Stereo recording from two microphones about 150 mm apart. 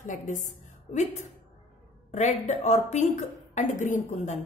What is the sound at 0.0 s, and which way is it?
A woman's voice, 60° left (ahead or behind).